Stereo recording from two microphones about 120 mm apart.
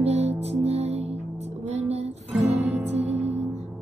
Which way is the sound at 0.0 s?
60° right (ahead or behind).